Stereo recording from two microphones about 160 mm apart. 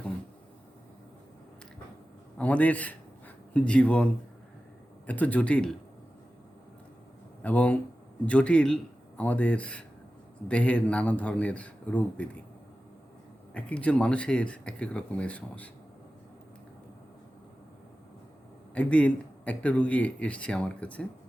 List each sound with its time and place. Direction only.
2.4 s a man's voice: 10° left (ahead or behind)
7.4 s speech: 10° left (ahead or behind)
13.5 s speech: 10° left (ahead or behind)
18.7 s speech: 5° left (ahead or behind)